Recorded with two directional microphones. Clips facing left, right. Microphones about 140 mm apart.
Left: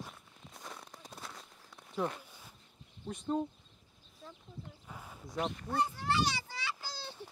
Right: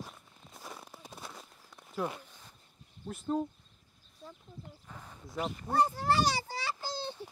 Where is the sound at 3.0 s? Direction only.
5° right (ahead or behind).